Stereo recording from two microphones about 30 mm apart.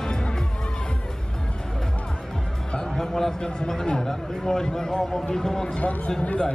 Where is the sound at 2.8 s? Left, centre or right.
Centre.